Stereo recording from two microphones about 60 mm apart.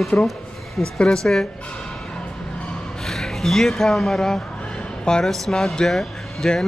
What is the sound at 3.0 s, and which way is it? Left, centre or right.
Speech, centre.